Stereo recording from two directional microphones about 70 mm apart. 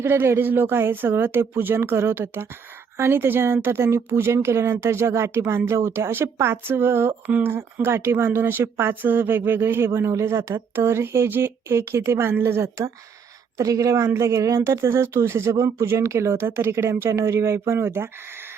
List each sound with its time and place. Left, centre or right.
0.0 s speech: right
7.3 s speech: right
7.5 s speech: right
13.6 s speech: right